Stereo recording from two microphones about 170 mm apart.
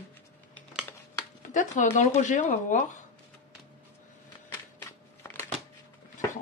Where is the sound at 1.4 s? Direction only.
45° left (ahead or behind).